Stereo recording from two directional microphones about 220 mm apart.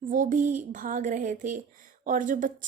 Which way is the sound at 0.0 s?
35° right (ahead or behind).